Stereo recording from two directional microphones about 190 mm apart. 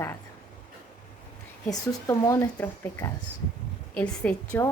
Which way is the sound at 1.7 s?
15° left (ahead or behind).